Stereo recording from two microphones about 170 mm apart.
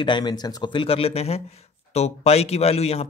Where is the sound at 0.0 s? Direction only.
25° left (ahead or behind).